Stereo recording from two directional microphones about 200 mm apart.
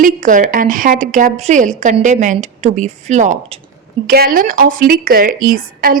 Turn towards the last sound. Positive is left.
turn(degrees=-45)  # may be behind; listen again after turning